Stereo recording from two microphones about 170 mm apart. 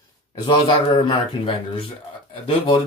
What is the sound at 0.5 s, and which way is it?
Speech, 25° left (ahead or behind).